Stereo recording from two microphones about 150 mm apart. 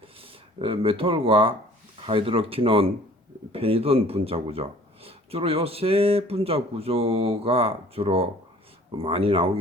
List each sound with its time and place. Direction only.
0.2 s a man's voice: 40° right (ahead or behind)